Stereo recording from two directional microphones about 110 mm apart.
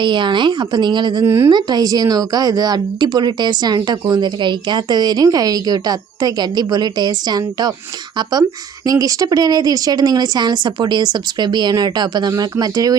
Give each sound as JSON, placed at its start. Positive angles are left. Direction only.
{"t": 0.0, "sound": "speech", "side_deg": -45}
{"t": 1.2, "sound": "a woman's voice", "side_deg": -25}
{"t": 1.5, "sound": "a woman's voice", "side_deg": -40}
{"t": 8.9, "sound": "a woman's voice", "side_deg": -35}